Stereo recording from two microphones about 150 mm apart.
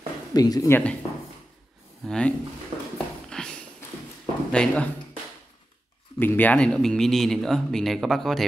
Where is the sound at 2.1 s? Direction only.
5° left (ahead or behind).